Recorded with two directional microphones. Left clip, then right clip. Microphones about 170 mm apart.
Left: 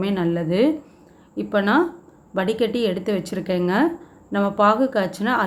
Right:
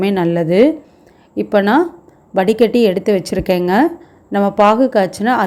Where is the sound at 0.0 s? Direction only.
40° right (ahead or behind).